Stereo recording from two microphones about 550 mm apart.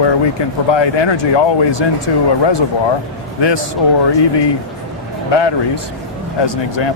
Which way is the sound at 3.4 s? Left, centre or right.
Left.